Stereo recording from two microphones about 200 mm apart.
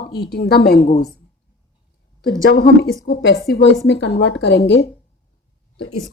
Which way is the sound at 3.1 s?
60° left (ahead or behind).